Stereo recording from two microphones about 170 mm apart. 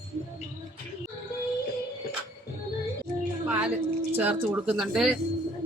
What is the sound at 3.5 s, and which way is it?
A woman's voice, 10° right (ahead or behind).